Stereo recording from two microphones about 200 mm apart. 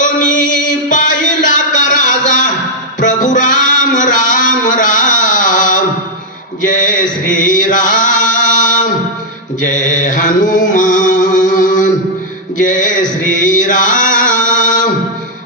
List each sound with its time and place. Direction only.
0.0 s music: 40° left (ahead or behind)
2.0 s a sound: 40° left (ahead or behind)
3.0 s music: 40° left (ahead or behind)
6.7 s chant: 40° left (ahead or behind)
9.6 s mantra: 40° left (ahead or behind)
12.6 s chant: 40° left (ahead or behind)